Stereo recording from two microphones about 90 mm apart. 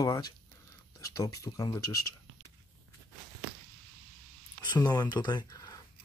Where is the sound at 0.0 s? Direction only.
45° left (ahead or behind).